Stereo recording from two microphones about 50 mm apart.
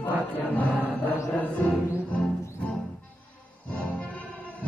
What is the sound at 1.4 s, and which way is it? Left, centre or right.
Music, left.